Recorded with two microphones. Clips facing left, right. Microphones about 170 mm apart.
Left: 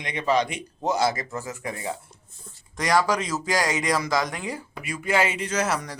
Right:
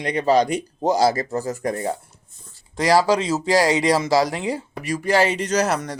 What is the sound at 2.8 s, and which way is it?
Speech, 30° right (ahead or behind).